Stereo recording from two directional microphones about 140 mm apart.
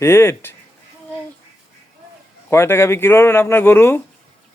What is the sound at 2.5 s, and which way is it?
Speech, 20° left (ahead or behind).